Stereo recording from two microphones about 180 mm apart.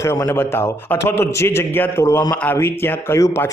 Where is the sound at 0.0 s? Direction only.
15° left (ahead or behind).